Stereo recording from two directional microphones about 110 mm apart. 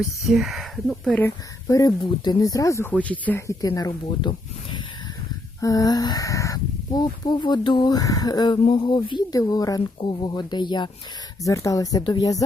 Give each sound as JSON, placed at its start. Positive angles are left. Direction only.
{"t": 0.3, "sound": "speech", "side_deg": 0}
{"t": 1.6, "sound": "speech", "side_deg": 30}
{"t": 2.9, "sound": "speech", "side_deg": 15}
{"t": 3.4, "sound": "speech", "side_deg": 35}
{"t": 5.5, "sound": "speech", "side_deg": 30}
{"t": 8.7, "sound": "speech", "side_deg": 50}
{"t": 10.0, "sound": "speech", "side_deg": 45}
{"t": 11.4, "sound": "speech", "side_deg": 30}